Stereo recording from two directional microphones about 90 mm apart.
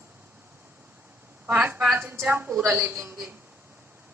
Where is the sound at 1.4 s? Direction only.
20° right (ahead or behind).